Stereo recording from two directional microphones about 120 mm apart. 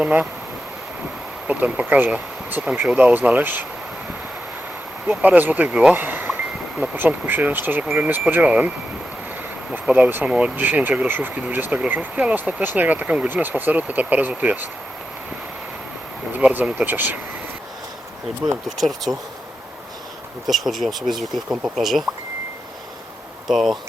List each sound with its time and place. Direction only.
0.0 s speech: 10° right (ahead or behind)
1.5 s speech: 10° right (ahead or behind)
5.0 s speech: 10° right (ahead or behind)
9.7 s speech: 10° right (ahead or behind)
16.3 s speech: 15° right (ahead or behind)
18.4 s speech: centre (ahead or behind)
20.5 s speech: centre (ahead or behind)
23.5 s speech: centre (ahead or behind)